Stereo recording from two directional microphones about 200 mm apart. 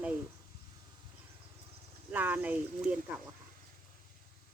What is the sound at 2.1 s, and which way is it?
Speech, 10° right (ahead or behind).